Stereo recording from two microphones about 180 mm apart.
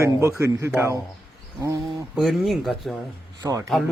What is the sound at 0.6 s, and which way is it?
Speech, 15° right (ahead or behind).